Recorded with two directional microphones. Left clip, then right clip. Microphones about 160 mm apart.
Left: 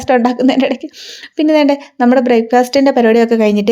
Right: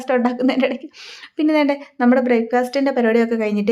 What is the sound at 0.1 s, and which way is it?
Speech, 25° left (ahead or behind).